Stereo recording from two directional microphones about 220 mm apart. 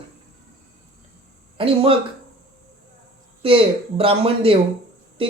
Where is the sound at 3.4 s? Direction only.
25° right (ahead or behind).